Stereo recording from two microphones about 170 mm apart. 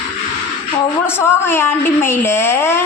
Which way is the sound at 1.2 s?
15° left (ahead or behind).